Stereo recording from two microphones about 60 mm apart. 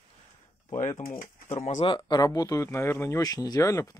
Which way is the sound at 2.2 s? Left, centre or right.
Left.